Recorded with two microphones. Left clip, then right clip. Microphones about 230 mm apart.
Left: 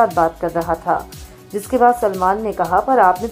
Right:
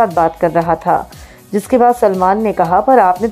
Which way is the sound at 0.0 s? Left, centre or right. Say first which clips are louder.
Right 3 dB; right.